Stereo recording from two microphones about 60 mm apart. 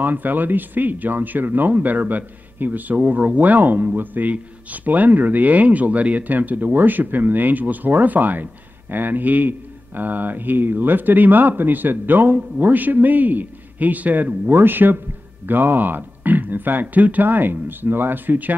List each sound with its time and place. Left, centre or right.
0.0 s a man's voice: right